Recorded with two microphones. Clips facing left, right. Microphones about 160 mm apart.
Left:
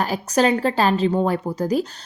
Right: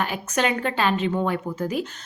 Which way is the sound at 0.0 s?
35° left (ahead or behind).